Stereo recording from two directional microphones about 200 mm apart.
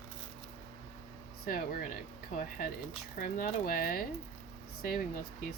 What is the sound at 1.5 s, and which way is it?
Speech, 45° left (ahead or behind).